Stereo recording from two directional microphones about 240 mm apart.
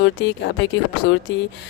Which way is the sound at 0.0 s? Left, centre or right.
Left.